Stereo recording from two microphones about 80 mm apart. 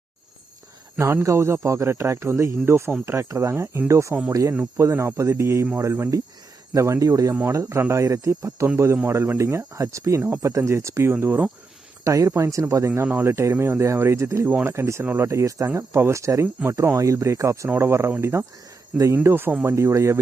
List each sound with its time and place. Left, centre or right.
0.9 s speech: right
12.0 s speech: right